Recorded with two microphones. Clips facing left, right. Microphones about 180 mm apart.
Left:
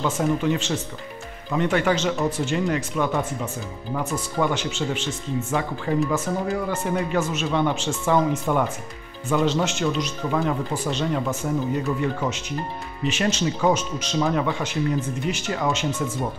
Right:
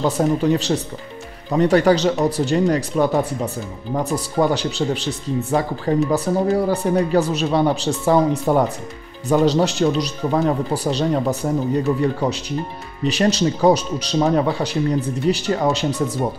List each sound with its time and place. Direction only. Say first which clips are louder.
0.0 s speech: right 4 dB; 35° right (ahead or behind)